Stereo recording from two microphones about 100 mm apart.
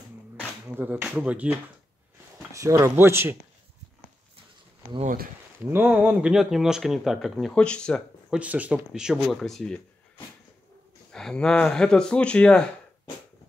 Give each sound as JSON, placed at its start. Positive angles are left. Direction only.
{"t": 0.7, "sound": "speech", "side_deg": -15}
{"t": 2.5, "sound": "speech", "side_deg": -30}
{"t": 5.6, "sound": "speech", "side_deg": -20}
{"t": 7.5, "sound": "speech", "side_deg": 10}
{"t": 8.3, "sound": "speech", "side_deg": -15}
{"t": 11.1, "sound": "speech", "side_deg": 5}